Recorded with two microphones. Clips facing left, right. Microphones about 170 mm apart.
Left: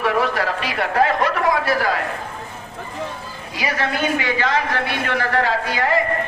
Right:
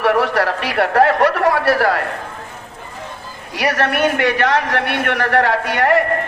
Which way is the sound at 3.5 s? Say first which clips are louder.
Right 5 dB; 75° right (ahead or behind).